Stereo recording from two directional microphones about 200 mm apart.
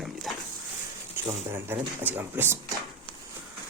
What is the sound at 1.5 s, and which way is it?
Speech, 10° right (ahead or behind).